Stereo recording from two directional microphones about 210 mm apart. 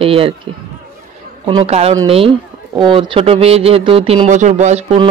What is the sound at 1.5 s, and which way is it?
Speech, 25° right (ahead or behind).